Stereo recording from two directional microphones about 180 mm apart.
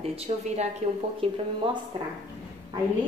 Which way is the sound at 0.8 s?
40° right (ahead or behind).